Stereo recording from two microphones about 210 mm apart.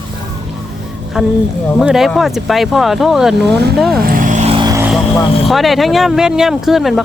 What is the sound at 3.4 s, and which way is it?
Speech, 50° right (ahead or behind).